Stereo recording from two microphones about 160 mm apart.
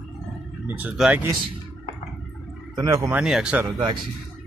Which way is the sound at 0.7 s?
10° right (ahead or behind).